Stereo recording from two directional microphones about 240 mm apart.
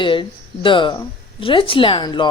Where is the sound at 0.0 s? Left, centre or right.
Left.